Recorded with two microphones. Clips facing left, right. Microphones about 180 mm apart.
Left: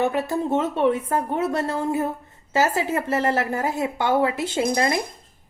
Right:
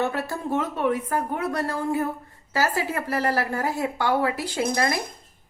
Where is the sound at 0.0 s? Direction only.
15° left (ahead or behind).